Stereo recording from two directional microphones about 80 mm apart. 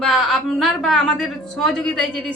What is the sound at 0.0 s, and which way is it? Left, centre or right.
A woman's voice, centre.